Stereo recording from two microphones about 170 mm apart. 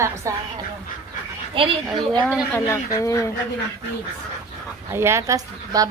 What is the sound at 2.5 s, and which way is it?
Speech, 15° left (ahead or behind).